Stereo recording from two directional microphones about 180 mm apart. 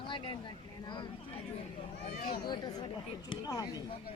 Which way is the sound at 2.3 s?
25° left (ahead or behind).